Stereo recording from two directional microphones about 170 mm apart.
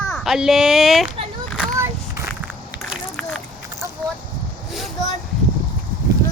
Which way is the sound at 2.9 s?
Centre (ahead or behind).